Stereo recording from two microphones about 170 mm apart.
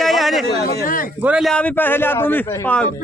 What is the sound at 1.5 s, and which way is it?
A man's voice, 10° left (ahead or behind).